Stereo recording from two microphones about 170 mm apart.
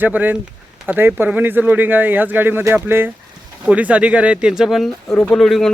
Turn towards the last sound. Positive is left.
turn(degrees=0)  # may be behind; listen again after turning